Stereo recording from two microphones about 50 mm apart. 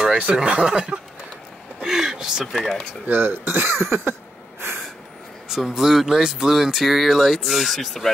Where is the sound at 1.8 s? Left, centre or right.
Centre.